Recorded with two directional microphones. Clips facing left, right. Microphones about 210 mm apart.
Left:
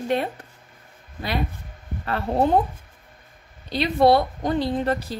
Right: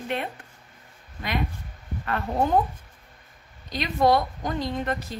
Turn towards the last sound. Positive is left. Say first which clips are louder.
# left 5 dB
turn(degrees=35)  # may be behind; listen again after turning